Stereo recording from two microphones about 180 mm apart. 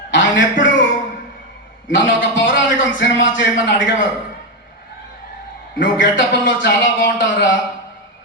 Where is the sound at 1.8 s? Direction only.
90° left.